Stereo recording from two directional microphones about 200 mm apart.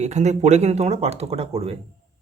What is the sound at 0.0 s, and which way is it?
A man's voice, 35° right (ahead or behind).